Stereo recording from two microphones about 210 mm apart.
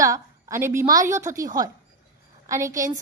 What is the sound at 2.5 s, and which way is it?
Speech, 15° right (ahead or behind).